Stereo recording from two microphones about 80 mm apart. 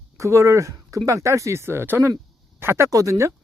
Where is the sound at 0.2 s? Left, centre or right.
Right.